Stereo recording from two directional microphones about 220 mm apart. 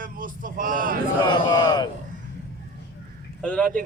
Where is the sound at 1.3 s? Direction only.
20° left (ahead or behind).